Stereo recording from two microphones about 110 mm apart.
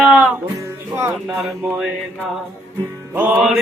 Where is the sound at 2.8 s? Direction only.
20° right (ahead or behind).